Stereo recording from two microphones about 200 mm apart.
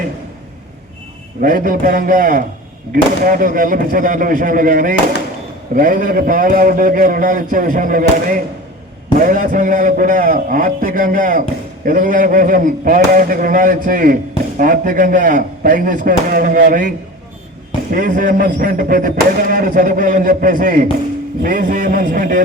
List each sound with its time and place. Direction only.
1.4 s a man's voice: 45° right (ahead or behind)
17.9 s a man's voice: 40° right (ahead or behind)